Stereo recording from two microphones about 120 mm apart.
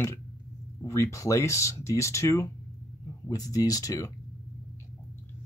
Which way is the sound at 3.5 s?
30° left (ahead or behind).